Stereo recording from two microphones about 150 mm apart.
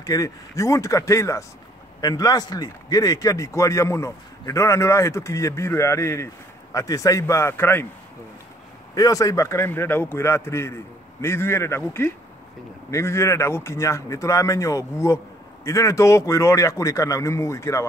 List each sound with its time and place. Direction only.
0.0 s a man's voice: 25° left (ahead or behind)
8.9 s a man's voice: 25° left (ahead or behind)